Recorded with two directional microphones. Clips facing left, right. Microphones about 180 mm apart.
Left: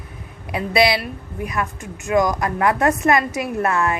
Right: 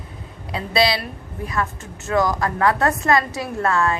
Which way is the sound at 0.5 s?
20° left (ahead or behind).